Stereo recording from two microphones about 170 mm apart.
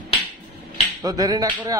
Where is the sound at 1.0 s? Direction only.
20° right (ahead or behind).